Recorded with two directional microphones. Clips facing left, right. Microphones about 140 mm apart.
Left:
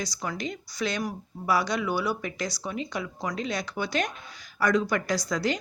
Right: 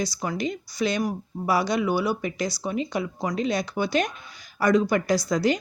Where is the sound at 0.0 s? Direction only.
20° right (ahead or behind).